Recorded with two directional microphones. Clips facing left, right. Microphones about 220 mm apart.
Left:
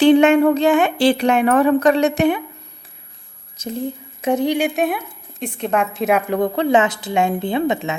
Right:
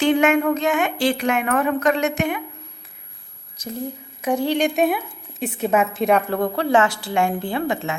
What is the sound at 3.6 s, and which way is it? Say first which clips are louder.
Speech: left 4 dB; 25° left (ahead or behind).